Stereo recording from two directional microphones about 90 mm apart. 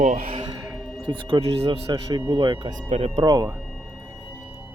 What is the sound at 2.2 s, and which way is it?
Speech, 75° right (ahead or behind).